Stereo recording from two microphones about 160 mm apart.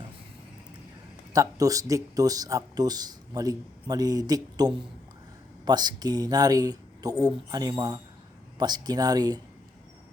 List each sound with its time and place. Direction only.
1.3 s speech: 20° right (ahead or behind)